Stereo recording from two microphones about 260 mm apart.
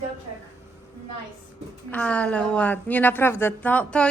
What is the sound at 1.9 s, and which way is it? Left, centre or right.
A woman's voice, centre.